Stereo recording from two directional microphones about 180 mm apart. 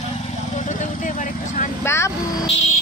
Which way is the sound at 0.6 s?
45° left (ahead or behind).